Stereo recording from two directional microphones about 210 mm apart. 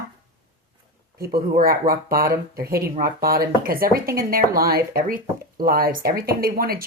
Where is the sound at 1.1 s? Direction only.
45° right (ahead or behind).